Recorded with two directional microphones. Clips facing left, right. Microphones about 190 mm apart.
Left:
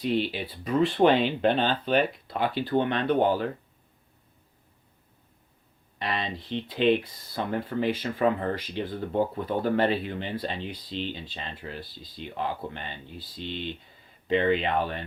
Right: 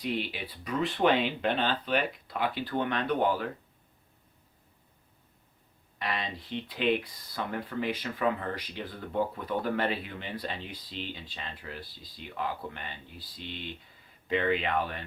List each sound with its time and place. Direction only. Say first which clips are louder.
0.0 s speech: left 6 dB; 30° left (ahead or behind)
6.0 s speech: left 3 dB; 25° left (ahead or behind)